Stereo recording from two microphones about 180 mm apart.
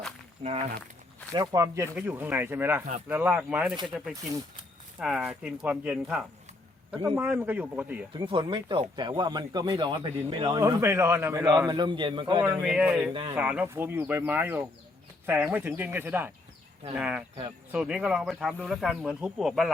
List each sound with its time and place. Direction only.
0.4 s speech: 35° right (ahead or behind)
1.3 s speech: 20° right (ahead or behind)
8.2 s speech: 30° right (ahead or behind)
10.8 s speech: 15° right (ahead or behind)
12.4 s speech: 5° right (ahead or behind)